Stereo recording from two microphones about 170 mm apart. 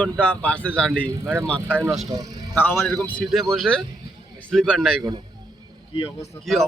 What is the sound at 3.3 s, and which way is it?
Speech, centre (ahead or behind).